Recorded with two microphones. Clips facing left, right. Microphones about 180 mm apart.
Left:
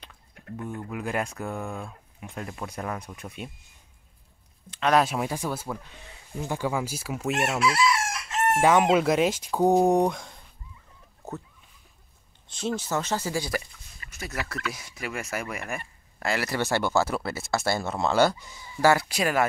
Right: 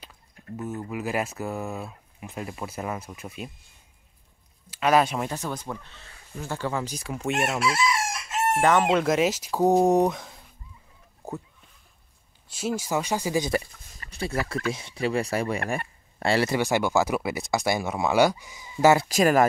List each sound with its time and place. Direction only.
0.6 s speech: 5° right (ahead or behind)
4.6 s speech: 5° right (ahead or behind)
7.6 s chicken: 30° right (ahead or behind)
8.5 s speech: 10° left (ahead or behind)
11.2 s a sound: 15° right (ahead or behind)
12.4 s speech: 10° right (ahead or behind)
13.7 s speech: 45° right (ahead or behind)
16.5 s speech: 15° right (ahead or behind)
19.0 s speech: 40° right (ahead or behind)